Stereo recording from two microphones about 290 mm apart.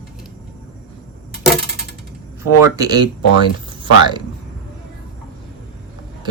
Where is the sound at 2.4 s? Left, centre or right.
Centre.